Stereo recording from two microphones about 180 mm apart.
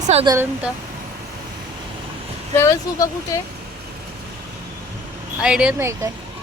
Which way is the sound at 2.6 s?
15° left (ahead or behind).